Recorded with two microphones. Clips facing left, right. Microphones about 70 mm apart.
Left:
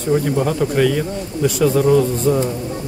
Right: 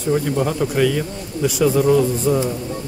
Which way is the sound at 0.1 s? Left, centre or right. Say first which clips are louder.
Left 2 dB; centre.